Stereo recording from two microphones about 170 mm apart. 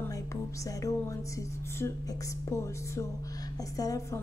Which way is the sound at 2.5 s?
20° left (ahead or behind).